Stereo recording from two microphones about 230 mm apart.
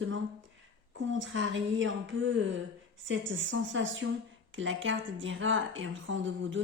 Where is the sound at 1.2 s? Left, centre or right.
Right.